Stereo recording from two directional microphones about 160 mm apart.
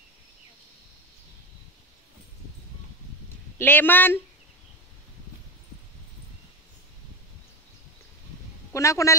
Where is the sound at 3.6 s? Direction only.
15° left (ahead or behind).